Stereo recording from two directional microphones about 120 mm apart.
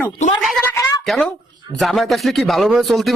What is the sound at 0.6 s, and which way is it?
Speech, 15° left (ahead or behind).